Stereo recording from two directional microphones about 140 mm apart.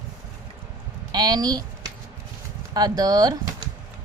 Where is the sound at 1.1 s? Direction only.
30° right (ahead or behind).